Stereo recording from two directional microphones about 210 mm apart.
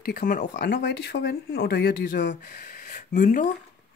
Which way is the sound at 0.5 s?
55° left (ahead or behind).